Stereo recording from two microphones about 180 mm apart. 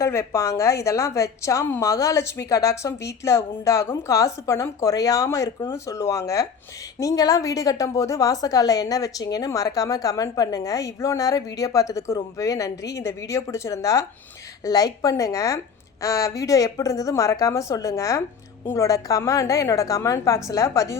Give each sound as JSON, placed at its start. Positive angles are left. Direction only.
{"t": 0.0, "sound": "a woman's voice", "side_deg": 15}